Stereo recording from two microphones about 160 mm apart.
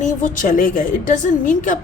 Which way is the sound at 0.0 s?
55° left (ahead or behind).